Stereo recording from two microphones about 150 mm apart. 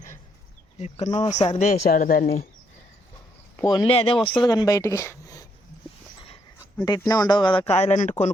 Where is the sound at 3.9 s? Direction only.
40° left (ahead or behind); by 5.5 s 25° left (ahead or behind).